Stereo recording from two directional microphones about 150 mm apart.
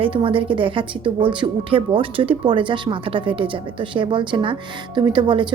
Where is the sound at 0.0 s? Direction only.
35° right (ahead or behind).